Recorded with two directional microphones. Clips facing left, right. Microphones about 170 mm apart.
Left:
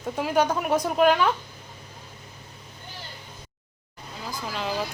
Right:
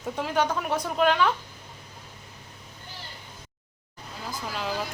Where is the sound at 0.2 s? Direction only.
10° left (ahead or behind).